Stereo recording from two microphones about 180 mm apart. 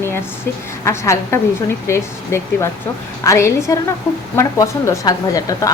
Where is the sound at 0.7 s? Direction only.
15° left (ahead or behind).